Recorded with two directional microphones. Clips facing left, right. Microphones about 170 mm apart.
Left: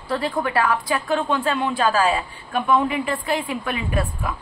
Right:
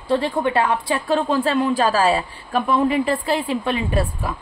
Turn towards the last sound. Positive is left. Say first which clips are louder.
# right 3 dB
turn(degrees=-30)  # may be behind; listen again after turning